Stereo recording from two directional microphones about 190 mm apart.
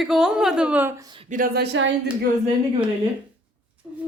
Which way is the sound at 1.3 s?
50° right (ahead or behind).